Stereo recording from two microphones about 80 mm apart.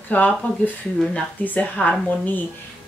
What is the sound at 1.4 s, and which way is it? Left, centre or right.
A woman's voice, centre.